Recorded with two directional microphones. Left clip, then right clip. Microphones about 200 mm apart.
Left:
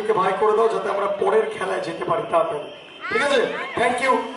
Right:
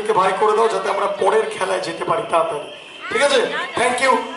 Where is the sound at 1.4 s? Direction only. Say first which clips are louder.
Right 3 dB; 10° left (ahead or behind).